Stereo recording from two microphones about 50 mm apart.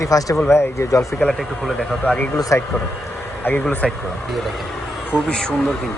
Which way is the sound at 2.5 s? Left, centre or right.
Left.